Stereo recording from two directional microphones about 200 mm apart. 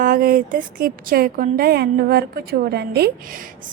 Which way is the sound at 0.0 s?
45° right (ahead or behind).